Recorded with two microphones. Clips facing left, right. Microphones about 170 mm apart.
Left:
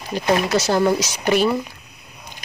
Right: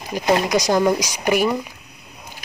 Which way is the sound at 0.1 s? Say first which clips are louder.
Right 1 dB; 10° right (ahead or behind).